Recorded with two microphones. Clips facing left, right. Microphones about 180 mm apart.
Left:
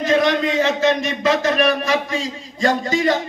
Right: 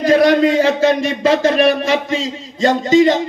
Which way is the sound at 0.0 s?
35° right (ahead or behind).